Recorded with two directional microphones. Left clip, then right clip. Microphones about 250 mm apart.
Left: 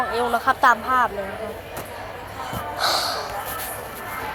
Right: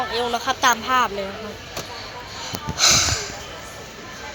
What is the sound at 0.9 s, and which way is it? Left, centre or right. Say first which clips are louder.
Speech: even; right.